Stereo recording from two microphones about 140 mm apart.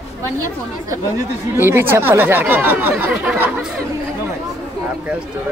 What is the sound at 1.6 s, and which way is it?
Speech, 15° right (ahead or behind).